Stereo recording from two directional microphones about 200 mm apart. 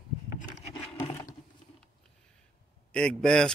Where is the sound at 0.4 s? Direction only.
35° left (ahead or behind).